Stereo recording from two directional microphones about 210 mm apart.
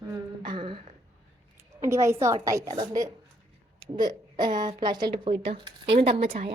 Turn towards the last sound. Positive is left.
turn(degrees=-25)  # may be behind; listen again after turning